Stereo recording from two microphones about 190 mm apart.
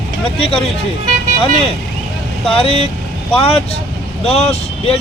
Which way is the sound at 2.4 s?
30° left (ahead or behind).